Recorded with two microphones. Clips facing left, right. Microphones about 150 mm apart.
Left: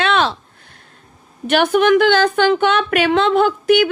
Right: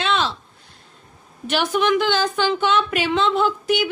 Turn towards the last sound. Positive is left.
turn(degrees=60)  # may be behind; listen again after turning